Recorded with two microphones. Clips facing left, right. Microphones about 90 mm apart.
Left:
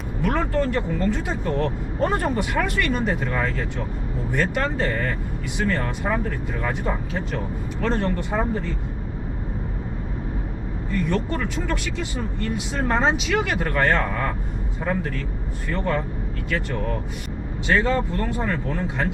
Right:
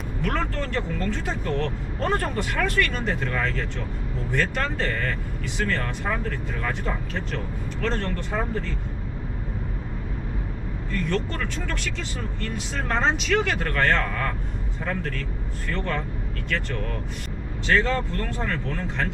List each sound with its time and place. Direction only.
0.2 s speech: 10° left (ahead or behind)
10.9 s speech: 10° left (ahead or behind)
15.7 s speech: 10° left (ahead or behind)